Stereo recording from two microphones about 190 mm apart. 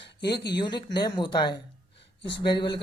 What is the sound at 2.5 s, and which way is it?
Speech, 25° left (ahead or behind).